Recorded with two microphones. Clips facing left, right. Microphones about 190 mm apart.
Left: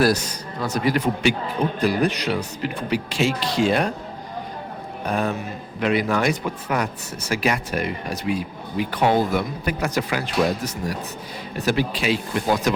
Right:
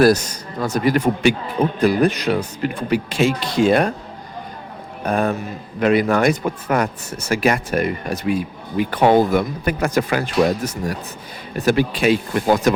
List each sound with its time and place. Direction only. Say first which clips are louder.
0.0 s speech: right 5 dB; 50° right (ahead or behind)
5.0 s speech: right 4 dB; 50° right (ahead or behind)